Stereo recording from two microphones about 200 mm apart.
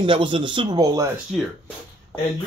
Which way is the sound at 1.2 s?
Centre (ahead or behind).